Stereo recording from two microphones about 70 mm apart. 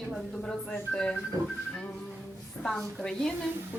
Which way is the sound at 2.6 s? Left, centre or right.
Centre.